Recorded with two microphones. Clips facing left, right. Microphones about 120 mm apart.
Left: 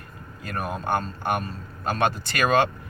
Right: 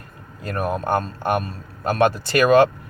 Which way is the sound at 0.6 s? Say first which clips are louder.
Right 5 dB; 55° right (ahead or behind).